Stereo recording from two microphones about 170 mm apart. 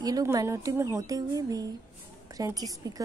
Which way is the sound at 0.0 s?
20° right (ahead or behind).